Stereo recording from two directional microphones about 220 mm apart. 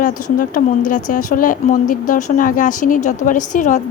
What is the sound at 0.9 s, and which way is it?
Speech, 35° left (ahead or behind).